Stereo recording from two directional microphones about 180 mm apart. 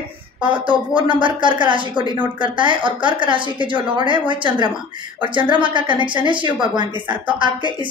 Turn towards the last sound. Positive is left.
turn(degrees=-25)  # may be behind; listen again after turning